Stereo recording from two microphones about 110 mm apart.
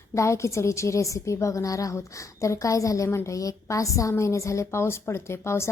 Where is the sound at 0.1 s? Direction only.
25° left (ahead or behind).